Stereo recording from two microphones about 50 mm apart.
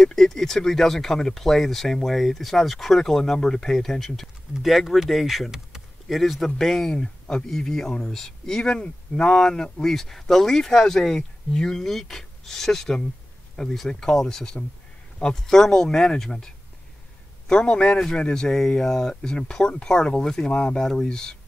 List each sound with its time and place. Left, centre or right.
0.0 s speech: centre
20.8 s speech: centre